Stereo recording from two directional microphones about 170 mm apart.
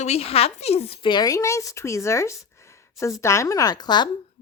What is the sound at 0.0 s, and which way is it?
A woman's voice, 35° left (ahead or behind).